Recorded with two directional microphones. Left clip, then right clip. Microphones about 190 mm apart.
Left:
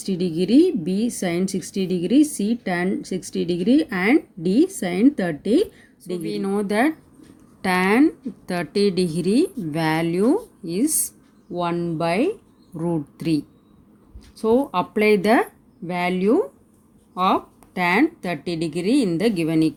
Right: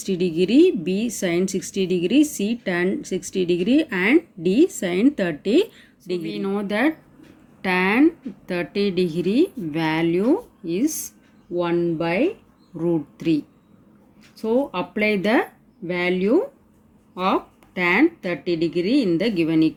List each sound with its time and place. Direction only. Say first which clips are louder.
0.0 s a woman's voice: right 3 dB; 45° left (ahead or behind)